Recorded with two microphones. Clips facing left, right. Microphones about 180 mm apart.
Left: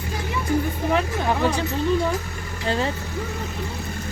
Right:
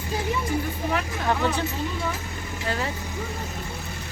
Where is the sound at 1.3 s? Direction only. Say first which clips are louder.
Left 1 dB; 15° left (ahead or behind).